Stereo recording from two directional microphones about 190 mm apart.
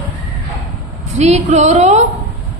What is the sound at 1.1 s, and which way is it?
Speech, 35° right (ahead or behind).